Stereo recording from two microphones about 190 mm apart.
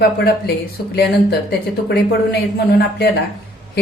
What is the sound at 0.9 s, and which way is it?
A woman's voice, 55° left (ahead or behind).